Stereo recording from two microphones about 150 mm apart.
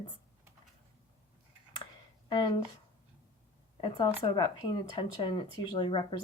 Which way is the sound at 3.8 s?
35° left (ahead or behind).